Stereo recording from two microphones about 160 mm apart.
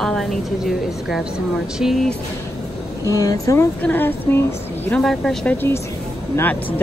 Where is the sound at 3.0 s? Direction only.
20° left (ahead or behind); by 5.5 s 5° left (ahead or behind).